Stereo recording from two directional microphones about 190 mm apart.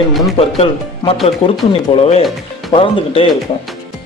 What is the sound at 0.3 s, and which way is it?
Speech, 30° left (ahead or behind).